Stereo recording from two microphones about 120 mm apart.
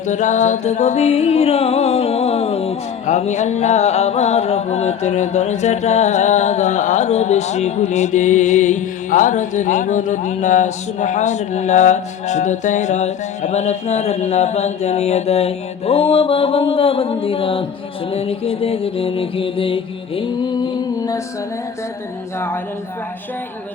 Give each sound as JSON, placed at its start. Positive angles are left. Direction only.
{"t": 0.1, "sound": "music", "side_deg": 90}